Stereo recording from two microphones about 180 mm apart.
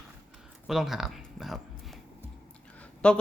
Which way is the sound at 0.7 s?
Centre (ahead or behind).